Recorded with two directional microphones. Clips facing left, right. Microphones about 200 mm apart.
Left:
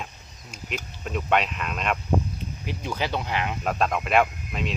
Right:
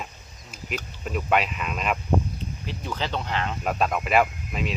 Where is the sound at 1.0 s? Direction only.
5° right (ahead or behind).